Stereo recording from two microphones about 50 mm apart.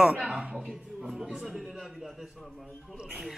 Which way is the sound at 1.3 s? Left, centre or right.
Centre.